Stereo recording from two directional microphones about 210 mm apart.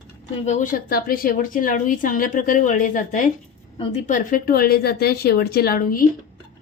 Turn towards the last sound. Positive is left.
turn(degrees=40)  # may be behind; listen again after turning